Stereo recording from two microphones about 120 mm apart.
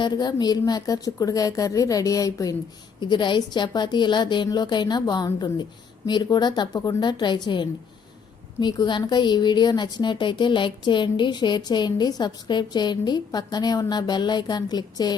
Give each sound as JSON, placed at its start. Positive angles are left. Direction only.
{"t": 0.0, "sound": "a woman's voice", "side_deg": 40}